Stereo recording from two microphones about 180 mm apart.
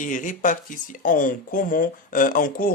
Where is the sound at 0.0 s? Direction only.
45° left (ahead or behind).